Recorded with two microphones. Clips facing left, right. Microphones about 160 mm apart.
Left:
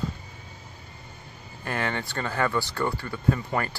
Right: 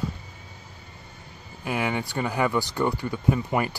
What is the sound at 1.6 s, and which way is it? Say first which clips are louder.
Speech: right 2 dB; 10° right (ahead or behind).